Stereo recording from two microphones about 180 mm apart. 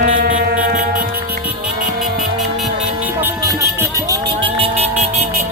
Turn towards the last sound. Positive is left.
turn(degrees=-35)  # may be behind; listen again after turning